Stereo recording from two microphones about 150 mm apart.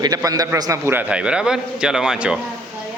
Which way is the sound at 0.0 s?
25° right (ahead or behind).